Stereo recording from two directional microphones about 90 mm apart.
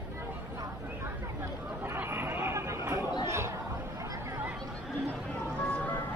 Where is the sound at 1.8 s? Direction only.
25° right (ahead or behind).